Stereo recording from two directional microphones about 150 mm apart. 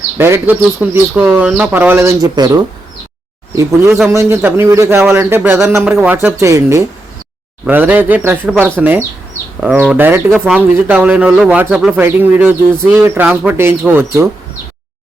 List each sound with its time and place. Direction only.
0.2 s speech: 15° right (ahead or behind)
2.2 s speech: 25° right (ahead or behind)
4.1 s speech: 20° right (ahead or behind)
10.3 s speech: 5° right (ahead or behind)